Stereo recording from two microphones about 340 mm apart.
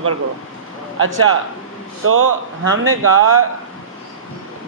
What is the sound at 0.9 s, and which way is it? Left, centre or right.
Speech, right.